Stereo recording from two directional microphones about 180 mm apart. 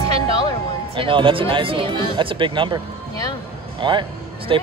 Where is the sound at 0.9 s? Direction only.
30° right (ahead or behind).